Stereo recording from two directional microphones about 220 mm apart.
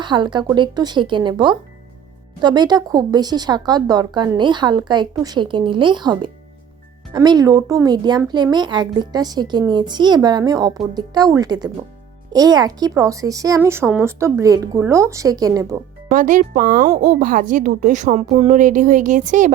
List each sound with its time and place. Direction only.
0.0 s speech: 20° right (ahead or behind)
16.0 s a woman's voice: 35° right (ahead or behind)